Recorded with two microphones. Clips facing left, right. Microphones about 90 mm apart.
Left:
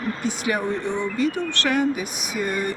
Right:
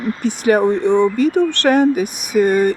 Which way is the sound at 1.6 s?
50° right (ahead or behind).